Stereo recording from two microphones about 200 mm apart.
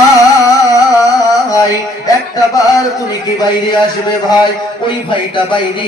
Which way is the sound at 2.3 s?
20° left (ahead or behind).